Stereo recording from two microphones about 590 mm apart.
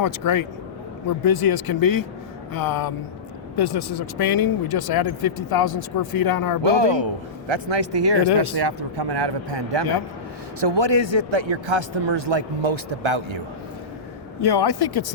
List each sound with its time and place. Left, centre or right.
0.0 s speech: left
6.6 s a man's voice: right
14.4 s speech: left